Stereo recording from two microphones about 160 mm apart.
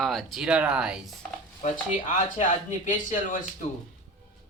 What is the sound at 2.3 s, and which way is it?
Speech, 55° left (ahead or behind).